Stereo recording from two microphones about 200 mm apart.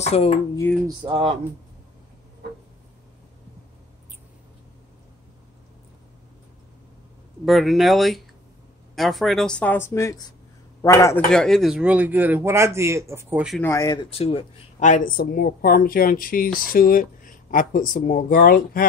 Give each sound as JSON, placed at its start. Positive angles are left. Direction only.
{"t": 0.0, "sound": "speech", "side_deg": 30}
{"t": 0.8, "sound": "speech", "side_deg": -20}
{"t": 7.4, "sound": "speech", "side_deg": 0}
{"t": 11.2, "sound": "speech", "side_deg": 5}
{"t": 13.6, "sound": "speech", "side_deg": 15}
{"t": 14.1, "sound": "speech", "side_deg": 30}